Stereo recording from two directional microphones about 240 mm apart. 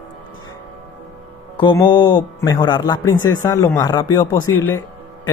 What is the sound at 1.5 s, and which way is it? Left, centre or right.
A man's voice, centre.